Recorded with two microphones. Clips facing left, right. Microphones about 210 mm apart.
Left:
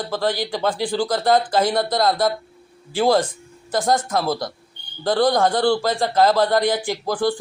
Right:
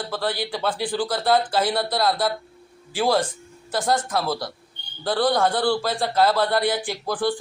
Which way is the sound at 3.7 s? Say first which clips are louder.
Left 3 dB; 15° left (ahead or behind).